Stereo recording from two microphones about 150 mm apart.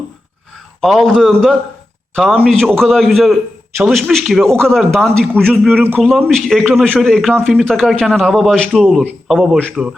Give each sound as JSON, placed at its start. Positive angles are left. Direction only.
{"t": 0.8, "sound": "a man's voice", "side_deg": 0}